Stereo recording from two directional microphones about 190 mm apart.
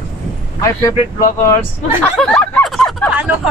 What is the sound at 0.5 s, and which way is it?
Speech, 15° left (ahead or behind).